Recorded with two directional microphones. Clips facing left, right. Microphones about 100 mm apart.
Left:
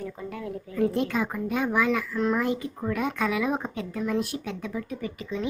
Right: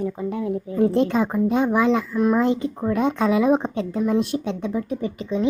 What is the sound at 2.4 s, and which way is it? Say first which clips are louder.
Speech: right 7 dB; 25° right (ahead or behind).